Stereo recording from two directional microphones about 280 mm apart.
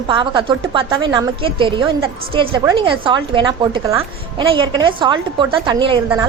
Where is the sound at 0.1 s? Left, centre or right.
Centre.